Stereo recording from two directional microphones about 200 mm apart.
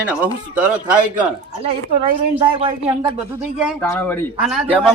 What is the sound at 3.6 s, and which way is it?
Speech, 5° left (ahead or behind).